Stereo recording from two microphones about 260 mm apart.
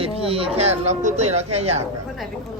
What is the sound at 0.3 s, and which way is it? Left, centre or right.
Speech, right.